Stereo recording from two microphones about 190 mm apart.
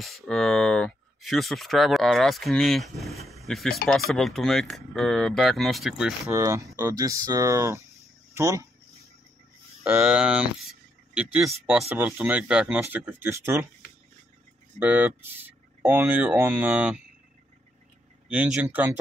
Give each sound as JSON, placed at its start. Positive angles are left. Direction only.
{"t": 0.0, "sound": "speech", "side_deg": 0}
{"t": 6.2, "sound": "speech", "side_deg": -15}
{"t": 9.8, "sound": "speech", "side_deg": -5}
{"t": 14.8, "sound": "speech", "side_deg": -10}
{"t": 18.3, "sound": "speech", "side_deg": -5}